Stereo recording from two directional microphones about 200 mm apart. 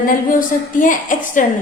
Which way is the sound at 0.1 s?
45° left (ahead or behind).